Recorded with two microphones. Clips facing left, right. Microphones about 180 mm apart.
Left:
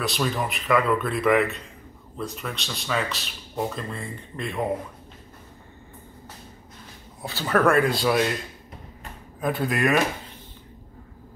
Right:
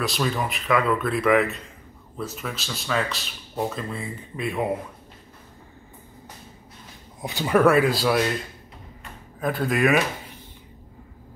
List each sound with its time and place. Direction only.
0.0 s speech: centre (ahead or behind)
7.2 s speech: 15° right (ahead or behind); by 8.4 s centre (ahead or behind)
9.4 s speech: centre (ahead or behind)